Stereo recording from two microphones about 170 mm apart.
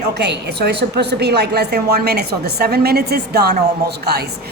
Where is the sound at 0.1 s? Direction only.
85° right.